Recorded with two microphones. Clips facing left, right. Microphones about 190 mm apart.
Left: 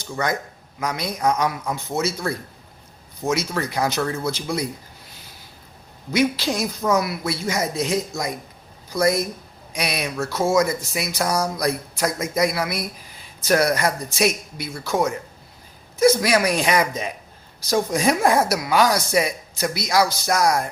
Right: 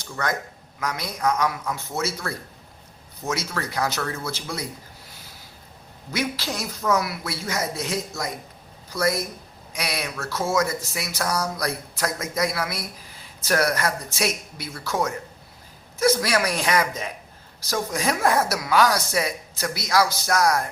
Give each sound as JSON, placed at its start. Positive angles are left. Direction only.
{"t": 0.8, "sound": "a woman's voice", "side_deg": 15}
{"t": 6.1, "sound": "a woman's voice", "side_deg": 15}